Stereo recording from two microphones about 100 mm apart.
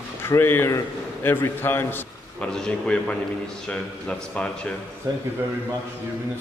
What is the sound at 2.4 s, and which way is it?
Speech, 5° left (ahead or behind).